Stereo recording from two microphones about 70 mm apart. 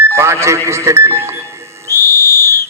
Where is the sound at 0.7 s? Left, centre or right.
Right.